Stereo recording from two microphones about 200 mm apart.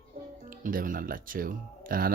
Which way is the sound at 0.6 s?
45° right (ahead or behind).